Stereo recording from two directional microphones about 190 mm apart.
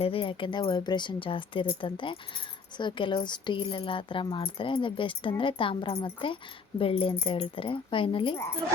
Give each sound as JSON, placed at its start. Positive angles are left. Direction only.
{"t": 0.0, "sound": "a woman's voice", "side_deg": 30}